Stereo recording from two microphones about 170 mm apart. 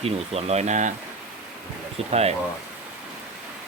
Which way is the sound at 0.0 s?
35° right (ahead or behind).